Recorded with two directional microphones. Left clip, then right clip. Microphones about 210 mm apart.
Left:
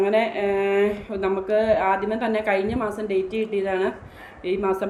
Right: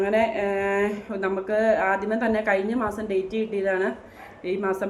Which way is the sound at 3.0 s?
5° right (ahead or behind).